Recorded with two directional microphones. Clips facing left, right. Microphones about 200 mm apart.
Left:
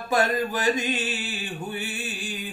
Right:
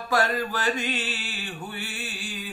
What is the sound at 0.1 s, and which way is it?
Mantra, 20° left (ahead or behind).